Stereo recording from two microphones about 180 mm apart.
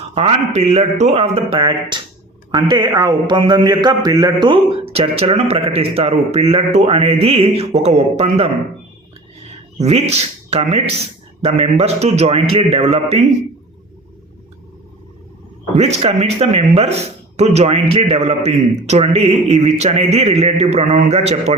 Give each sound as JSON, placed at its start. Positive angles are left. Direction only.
{"t": 0.1, "sound": "a man's voice", "side_deg": -35}
{"t": 9.7, "sound": "a man's voice", "side_deg": -35}
{"t": 15.7, "sound": "a man's voice", "side_deg": -35}